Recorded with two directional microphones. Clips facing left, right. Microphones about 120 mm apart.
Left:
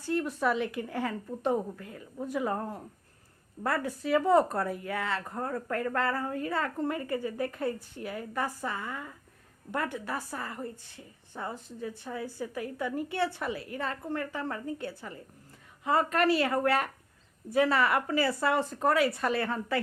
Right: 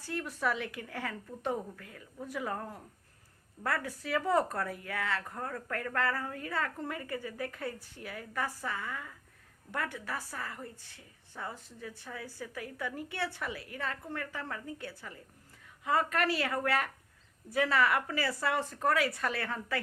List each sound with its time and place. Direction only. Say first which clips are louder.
0.1 s speech: left 5 dB; 25° left (ahead or behind)